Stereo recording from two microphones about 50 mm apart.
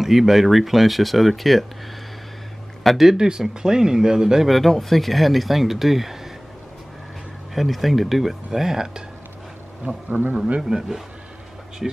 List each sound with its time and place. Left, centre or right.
0.0 s speech: centre
2.8 s speech: centre
3.1 s speech: centre
4.6 s speech: centre
7.5 s speech: centre
10.3 s speech: centre